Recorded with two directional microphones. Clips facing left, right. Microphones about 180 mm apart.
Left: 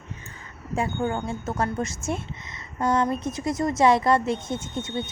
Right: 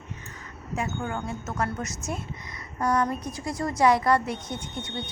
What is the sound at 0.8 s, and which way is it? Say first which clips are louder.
Speech: left 5 dB; 25° left (ahead or behind).